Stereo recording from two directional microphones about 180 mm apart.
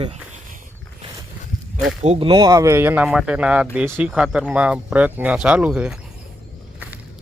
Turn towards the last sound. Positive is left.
turn(degrees=-5)  # may be behind; listen again after turning